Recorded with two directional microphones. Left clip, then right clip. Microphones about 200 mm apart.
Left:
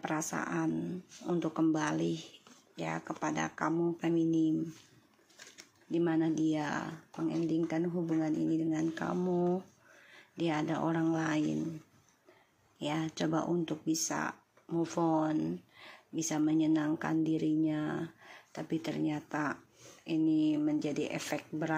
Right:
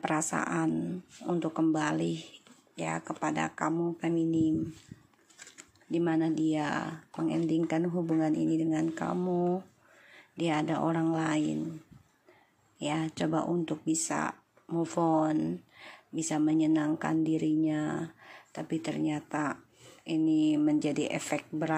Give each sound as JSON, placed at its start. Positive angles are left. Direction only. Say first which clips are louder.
{"t": 0.3, "sound": "speech", "louder": "right 4 dB", "side_deg": -15}
{"t": 1.3, "sound": "speech", "louder": "right 2 dB", "side_deg": 0}
{"t": 5.9, "sound": "speech", "louder": "right 2 dB", "side_deg": -10}
{"t": 9.1, "sound": "speech", "louder": "right 1 dB", "side_deg": 0}
{"t": 12.7, "sound": "speech", "louder": "right 3 dB", "side_deg": -5}